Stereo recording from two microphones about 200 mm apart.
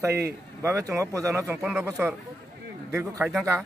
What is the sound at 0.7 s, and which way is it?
A man's voice, 15° right (ahead or behind).